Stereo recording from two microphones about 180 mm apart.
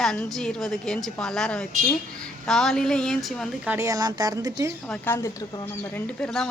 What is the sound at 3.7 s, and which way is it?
Speech, 15° right (ahead or behind).